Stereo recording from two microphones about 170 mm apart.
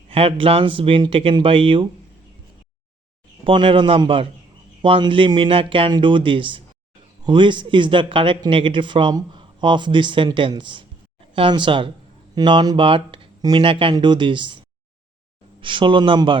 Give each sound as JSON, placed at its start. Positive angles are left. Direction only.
{"t": 0.1, "sound": "speech", "side_deg": -35}
{"t": 3.4, "sound": "a man's voice", "side_deg": -30}
{"t": 15.6, "sound": "a man's voice", "side_deg": -30}